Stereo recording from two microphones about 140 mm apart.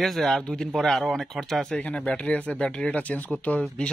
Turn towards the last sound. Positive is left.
turn(degrees=10)  # may be behind; listen again after turning